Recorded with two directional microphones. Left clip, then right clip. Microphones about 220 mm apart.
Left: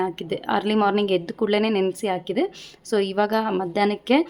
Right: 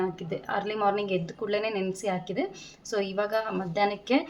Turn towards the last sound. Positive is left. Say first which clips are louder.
# left 5 dB
turn(degrees=50)  # may be behind; listen again after turning